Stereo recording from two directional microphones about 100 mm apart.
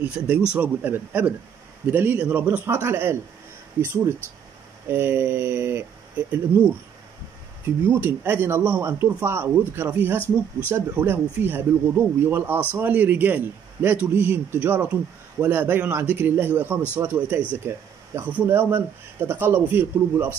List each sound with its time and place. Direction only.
0.0 s speech: 15° right (ahead or behind)
7.6 s speech: 20° right (ahead or behind)